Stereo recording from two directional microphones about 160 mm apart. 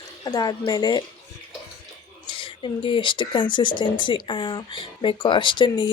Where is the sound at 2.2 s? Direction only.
35° left (ahead or behind).